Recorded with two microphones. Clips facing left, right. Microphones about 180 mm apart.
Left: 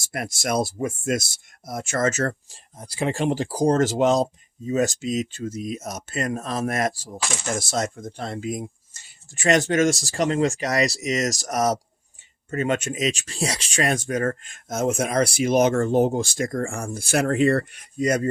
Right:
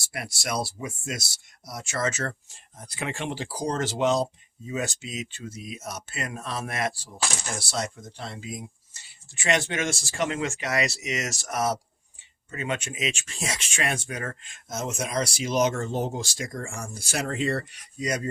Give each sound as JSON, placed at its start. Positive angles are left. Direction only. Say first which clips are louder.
{"t": 0.0, "sound": "speech", "louder": "left 6 dB", "side_deg": 45}
{"t": 2.7, "sound": "speech", "louder": "left 8 dB", "side_deg": 30}